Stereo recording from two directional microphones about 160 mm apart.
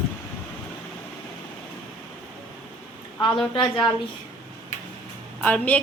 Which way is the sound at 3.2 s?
30° left (ahead or behind).